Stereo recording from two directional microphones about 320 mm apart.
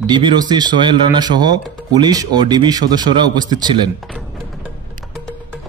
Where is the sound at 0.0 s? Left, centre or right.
Centre.